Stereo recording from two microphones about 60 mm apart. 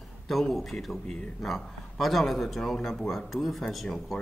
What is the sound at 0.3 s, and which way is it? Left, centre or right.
A man's voice, centre.